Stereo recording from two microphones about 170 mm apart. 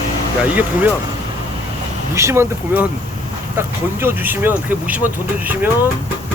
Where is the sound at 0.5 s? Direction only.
10° right (ahead or behind).